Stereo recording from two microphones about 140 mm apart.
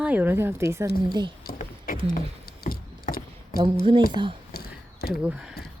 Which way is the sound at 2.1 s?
90° left.